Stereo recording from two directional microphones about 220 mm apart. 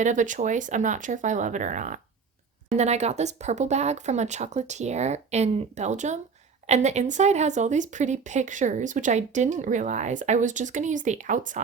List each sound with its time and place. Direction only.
0.0 s speech: 35° right (ahead or behind)